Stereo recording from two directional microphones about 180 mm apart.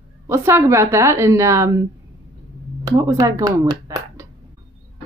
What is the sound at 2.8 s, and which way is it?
Speech, 20° right (ahead or behind).